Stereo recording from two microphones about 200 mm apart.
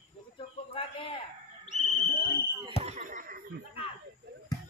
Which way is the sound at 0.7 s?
25° left (ahead or behind).